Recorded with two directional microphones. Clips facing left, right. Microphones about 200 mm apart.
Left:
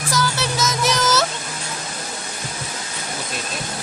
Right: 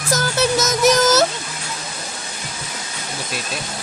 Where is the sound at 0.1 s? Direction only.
50° right (ahead or behind).